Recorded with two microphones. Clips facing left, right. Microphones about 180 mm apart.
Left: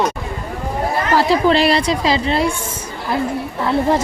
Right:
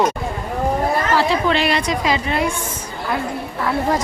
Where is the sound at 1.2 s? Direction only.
35° left (ahead or behind).